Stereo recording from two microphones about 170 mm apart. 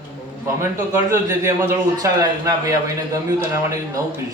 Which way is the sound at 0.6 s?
15° right (ahead or behind).